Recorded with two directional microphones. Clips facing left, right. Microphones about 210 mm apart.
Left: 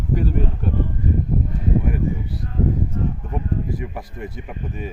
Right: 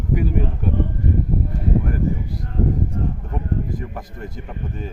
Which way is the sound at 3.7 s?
5° left (ahead or behind).